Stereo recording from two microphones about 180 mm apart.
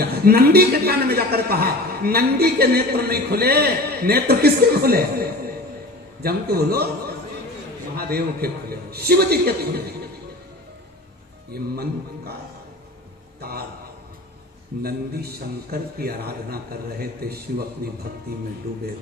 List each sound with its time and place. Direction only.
0.0 s a man's voice: 60° right (ahead or behind)
7.9 s a man's voice: 60° right (ahead or behind)
11.5 s a man's voice: 60° right (ahead or behind)
13.4 s a man's voice: 60° right (ahead or behind)
14.8 s a man's voice: 55° right (ahead or behind)